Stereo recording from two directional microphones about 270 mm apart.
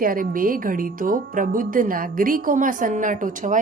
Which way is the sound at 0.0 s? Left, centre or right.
Right.